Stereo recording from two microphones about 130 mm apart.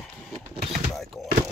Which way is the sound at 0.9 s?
Centre (ahead or behind).